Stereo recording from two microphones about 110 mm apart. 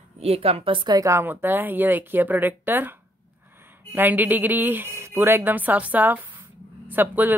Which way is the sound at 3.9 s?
15° right (ahead or behind).